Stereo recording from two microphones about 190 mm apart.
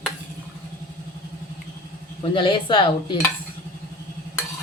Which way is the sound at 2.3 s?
25° left (ahead or behind).